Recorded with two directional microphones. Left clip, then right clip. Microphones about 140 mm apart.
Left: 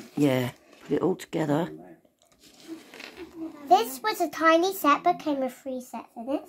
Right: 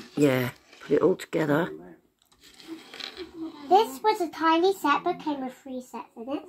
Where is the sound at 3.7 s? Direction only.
80° left.